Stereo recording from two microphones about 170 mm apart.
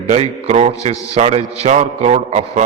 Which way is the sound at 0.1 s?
40° right (ahead or behind).